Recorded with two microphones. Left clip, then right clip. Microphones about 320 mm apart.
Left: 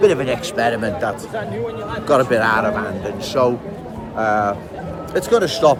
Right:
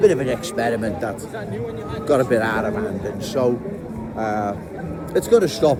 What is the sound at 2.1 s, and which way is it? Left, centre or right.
Speech, left.